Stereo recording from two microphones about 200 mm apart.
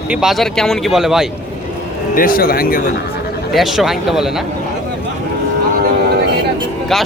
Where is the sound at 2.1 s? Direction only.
45° left (ahead or behind).